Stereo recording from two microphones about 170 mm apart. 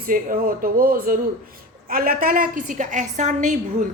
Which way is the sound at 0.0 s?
55° right (ahead or behind).